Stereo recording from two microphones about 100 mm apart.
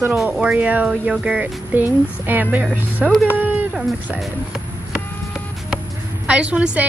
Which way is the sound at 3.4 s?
15° right (ahead or behind).